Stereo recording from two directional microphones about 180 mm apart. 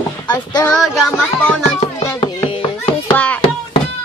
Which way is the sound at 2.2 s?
25° left (ahead or behind).